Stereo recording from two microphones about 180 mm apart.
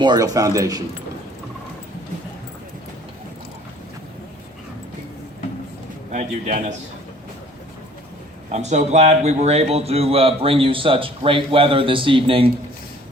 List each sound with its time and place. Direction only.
0.0 s speech: 20° right (ahead or behind)
6.1 s a man's voice: 45° right (ahead or behind)
8.5 s a man's voice: 40° right (ahead or behind)